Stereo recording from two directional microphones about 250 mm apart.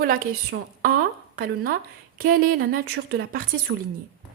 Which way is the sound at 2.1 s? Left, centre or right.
Right.